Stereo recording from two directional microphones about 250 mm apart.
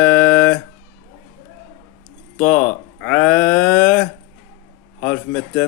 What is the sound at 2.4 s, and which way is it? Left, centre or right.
Speech, left.